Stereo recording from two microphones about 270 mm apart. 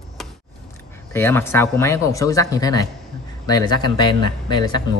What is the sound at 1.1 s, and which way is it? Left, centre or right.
Speech, centre.